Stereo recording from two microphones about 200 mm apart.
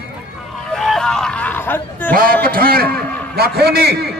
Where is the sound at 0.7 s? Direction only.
Centre (ahead or behind).